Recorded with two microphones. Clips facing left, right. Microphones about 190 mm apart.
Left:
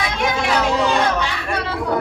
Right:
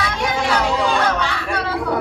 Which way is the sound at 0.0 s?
15° left (ahead or behind).